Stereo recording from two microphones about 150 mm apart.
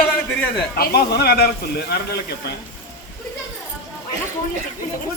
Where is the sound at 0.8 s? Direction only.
90° left.